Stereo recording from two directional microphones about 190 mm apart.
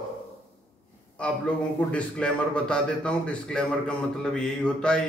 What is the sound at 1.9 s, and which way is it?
Mantra, 5° left (ahead or behind).